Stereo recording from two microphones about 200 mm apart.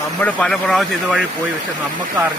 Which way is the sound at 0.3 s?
5° left (ahead or behind).